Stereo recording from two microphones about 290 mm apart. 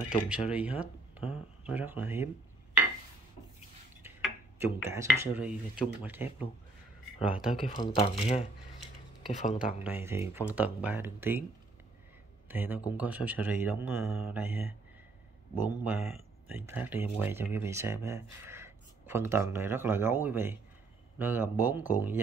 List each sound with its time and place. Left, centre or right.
0.3 s speech: centre
4.6 s speech: centre
7.6 s speech: centre
9.8 s speech: centre
12.4 s speech: centre